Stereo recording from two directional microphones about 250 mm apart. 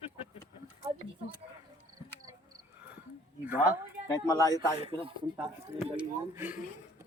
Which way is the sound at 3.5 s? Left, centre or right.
Centre.